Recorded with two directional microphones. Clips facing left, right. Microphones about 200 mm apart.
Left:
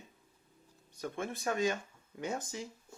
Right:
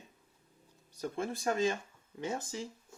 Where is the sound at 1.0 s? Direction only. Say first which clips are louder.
Right 2 dB; 30° right (ahead or behind).